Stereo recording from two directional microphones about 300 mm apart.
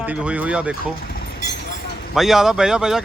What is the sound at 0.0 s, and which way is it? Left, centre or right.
Speech, centre.